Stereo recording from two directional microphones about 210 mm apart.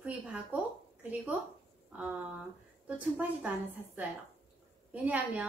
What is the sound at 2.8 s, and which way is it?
Speech, 5° right (ahead or behind).